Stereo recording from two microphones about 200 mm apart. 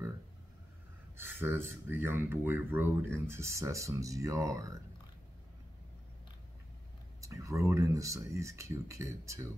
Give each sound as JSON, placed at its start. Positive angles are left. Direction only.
{"t": 1.1, "sound": "speech", "side_deg": -10}
{"t": 7.2, "sound": "speech", "side_deg": -15}